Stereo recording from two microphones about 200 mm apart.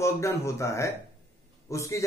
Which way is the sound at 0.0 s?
15° left (ahead or behind).